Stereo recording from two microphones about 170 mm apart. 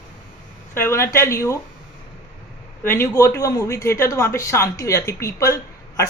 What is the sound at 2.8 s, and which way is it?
Speech, 15° left (ahead or behind).